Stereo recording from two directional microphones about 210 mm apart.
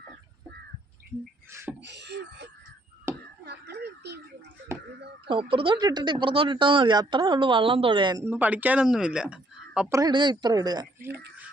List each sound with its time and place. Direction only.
1.5 s beatboxing: 10° right (ahead or behind)
1.8 s beatboxing: 55° right (ahead or behind)
3.1 s a sound: 10° right (ahead or behind)
3.4 s a sound: 55° right (ahead or behind)
5.2 s speech: 25° right (ahead or behind)
8.2 s speech: 10° right (ahead or behind)
9.9 s speech: 20° right (ahead or behind)